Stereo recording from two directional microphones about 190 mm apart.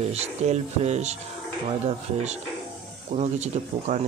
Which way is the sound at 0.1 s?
35° right (ahead or behind).